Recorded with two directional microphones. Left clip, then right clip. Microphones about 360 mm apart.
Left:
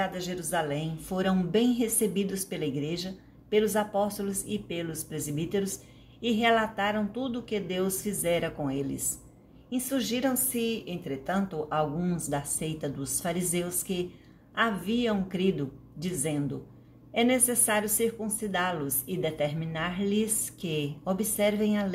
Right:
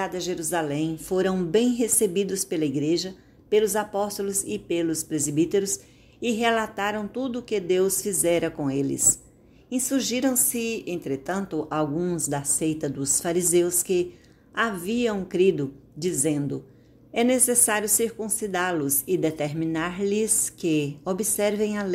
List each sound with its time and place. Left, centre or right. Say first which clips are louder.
0.0 s a woman's voice: right 4 dB; right